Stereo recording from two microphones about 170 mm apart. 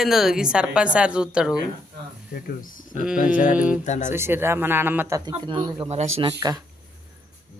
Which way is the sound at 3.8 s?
45° left (ahead or behind).